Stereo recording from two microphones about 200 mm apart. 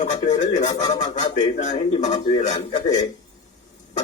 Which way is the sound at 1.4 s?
35° left (ahead or behind).